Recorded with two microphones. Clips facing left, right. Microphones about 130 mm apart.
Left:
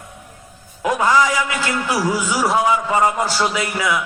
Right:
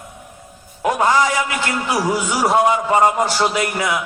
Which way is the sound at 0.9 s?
30° right (ahead or behind).